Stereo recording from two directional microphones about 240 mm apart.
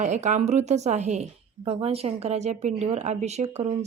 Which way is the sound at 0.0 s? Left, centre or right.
Right.